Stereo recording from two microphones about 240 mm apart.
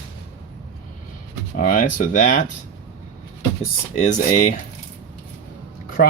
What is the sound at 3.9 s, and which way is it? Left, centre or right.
Speech, left.